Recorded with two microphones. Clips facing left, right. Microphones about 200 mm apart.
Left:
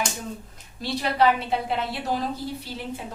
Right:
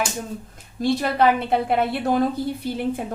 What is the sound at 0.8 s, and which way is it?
A woman's voice, 50° right (ahead or behind).